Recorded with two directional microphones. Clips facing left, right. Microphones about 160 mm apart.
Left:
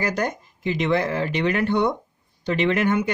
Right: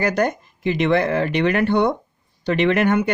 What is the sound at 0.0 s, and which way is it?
Speech, 60° right (ahead or behind).